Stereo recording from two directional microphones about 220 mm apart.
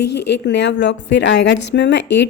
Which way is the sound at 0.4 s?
50° left (ahead or behind).